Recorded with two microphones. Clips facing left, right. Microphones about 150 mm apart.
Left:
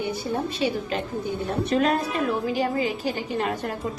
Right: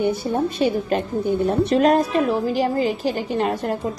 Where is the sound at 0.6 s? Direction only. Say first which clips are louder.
Right 6 dB; 50° right (ahead or behind).